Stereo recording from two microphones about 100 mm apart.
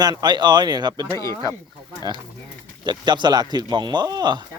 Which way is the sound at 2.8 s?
50° right (ahead or behind).